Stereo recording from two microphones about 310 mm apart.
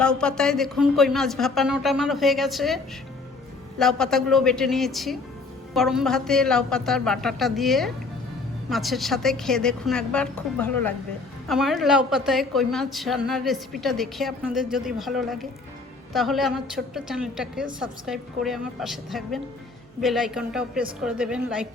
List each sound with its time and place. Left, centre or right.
0.0 s a woman's voice: centre